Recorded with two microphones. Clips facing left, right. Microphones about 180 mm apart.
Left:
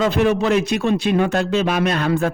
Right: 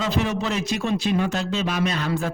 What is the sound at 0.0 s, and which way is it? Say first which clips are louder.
Speech: left 7 dB; 60° left (ahead or behind).